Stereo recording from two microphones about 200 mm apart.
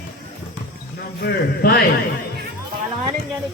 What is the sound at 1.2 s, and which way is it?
Speech, 50° left (ahead or behind).